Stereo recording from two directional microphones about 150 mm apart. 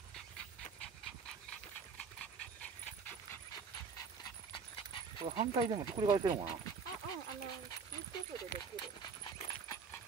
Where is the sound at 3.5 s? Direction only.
30° left (ahead or behind).